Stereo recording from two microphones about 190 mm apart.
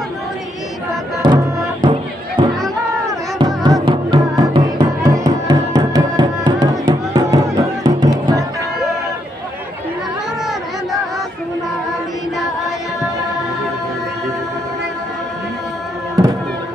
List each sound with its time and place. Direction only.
1.2 s music: 25° right (ahead or behind)